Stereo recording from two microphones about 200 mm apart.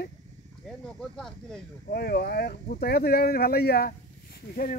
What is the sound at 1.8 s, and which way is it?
Speech, 50° left (ahead or behind).